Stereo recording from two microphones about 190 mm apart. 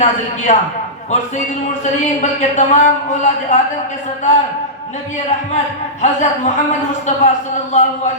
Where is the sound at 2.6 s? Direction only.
40° left (ahead or behind).